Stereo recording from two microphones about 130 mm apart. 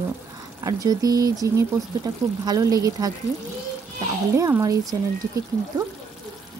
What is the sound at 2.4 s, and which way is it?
Speech, 25° right (ahead or behind).